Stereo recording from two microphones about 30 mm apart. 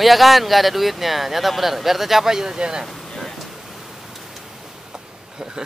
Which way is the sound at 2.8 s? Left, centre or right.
Centre.